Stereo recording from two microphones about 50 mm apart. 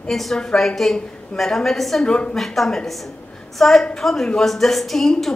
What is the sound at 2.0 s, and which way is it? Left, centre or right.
Speech, left.